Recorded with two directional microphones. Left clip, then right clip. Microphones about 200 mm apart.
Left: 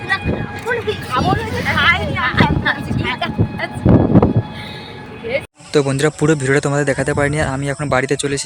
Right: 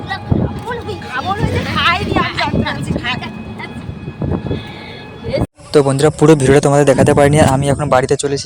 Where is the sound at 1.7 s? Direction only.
25° right (ahead or behind).